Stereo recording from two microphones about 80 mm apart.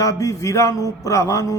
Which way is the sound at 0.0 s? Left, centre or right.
Left.